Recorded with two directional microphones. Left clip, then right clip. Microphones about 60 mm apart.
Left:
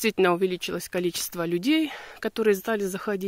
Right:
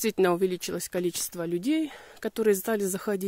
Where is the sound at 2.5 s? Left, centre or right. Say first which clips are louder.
Left 1 dB; right.